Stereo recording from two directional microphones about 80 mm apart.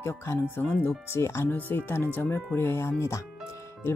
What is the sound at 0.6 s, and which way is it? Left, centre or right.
Speech, left.